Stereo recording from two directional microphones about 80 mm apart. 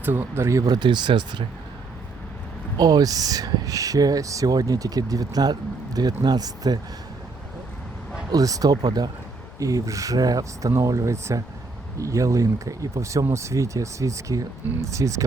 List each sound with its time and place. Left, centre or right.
0.0 s speech: right
0.6 s speech: right
2.7 s speech: right
8.3 s speech: right
9.6 s speech: right